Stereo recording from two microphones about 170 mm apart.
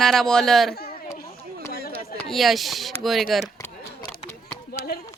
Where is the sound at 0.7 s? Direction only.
65° left (ahead or behind).